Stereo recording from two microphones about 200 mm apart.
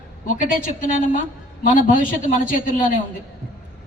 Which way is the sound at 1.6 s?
40° left (ahead or behind).